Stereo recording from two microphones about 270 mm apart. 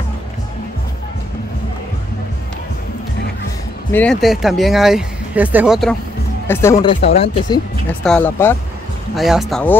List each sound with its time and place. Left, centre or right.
3.9 s speech: centre
8.0 s speech: centre